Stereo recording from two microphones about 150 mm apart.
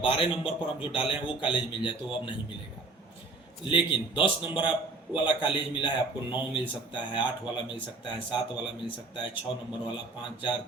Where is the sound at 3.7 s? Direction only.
35° left (ahead or behind).